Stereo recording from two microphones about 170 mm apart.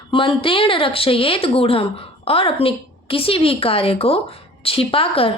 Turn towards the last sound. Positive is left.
turn(degrees=35)  # may be behind; listen again after turning